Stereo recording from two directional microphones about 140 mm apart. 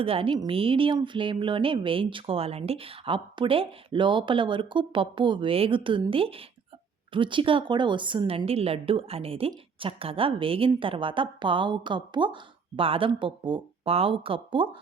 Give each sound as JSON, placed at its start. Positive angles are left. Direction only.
{"t": 0.0, "sound": "speech", "side_deg": -40}